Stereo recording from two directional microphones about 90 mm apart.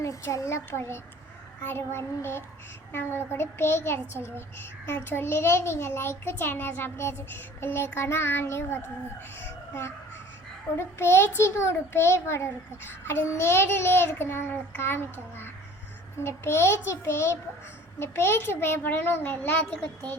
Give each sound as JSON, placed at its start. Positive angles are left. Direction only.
{"t": 0.0, "sound": "a child's voice", "side_deg": 35}